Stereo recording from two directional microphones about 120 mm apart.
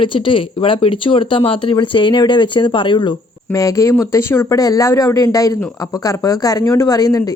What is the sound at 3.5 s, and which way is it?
Speech, 25° left (ahead or behind).